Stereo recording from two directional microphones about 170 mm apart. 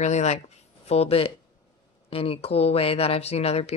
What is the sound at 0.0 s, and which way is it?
Speech, 40° left (ahead or behind).